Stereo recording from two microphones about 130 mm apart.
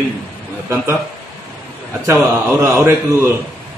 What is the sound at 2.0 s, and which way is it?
A man's voice, 20° right (ahead or behind).